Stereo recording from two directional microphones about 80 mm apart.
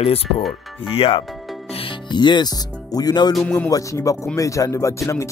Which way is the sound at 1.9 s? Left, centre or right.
Left.